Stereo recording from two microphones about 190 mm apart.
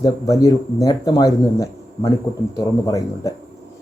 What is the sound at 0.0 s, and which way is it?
Speech, 15° left (ahead or behind).